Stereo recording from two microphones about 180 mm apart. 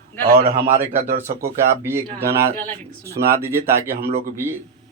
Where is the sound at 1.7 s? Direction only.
15° right (ahead or behind).